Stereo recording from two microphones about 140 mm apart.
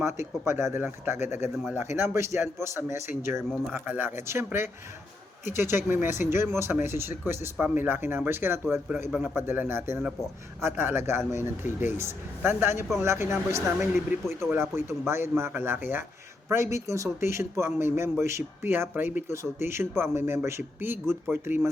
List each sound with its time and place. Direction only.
0.2 s speech: 20° right (ahead or behind)
9.0 s a man's voice: centre (ahead or behind)
9.3 s a man's voice: 15° right (ahead or behind)